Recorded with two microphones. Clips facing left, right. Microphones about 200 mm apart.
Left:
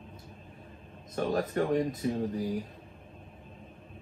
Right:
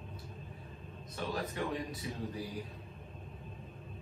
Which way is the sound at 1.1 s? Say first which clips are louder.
Left 9 dB; 50° left (ahead or behind).